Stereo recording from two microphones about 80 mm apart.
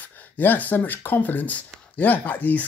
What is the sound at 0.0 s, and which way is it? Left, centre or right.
Speech, left.